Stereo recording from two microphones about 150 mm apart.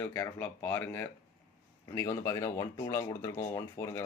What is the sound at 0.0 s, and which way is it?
Speech, 10° left (ahead or behind).